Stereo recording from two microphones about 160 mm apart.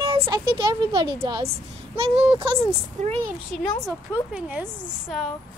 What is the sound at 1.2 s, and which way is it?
Speech, 20° right (ahead or behind).